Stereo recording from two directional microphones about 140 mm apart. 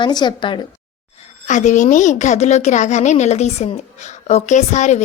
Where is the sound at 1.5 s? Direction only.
60° left (ahead or behind).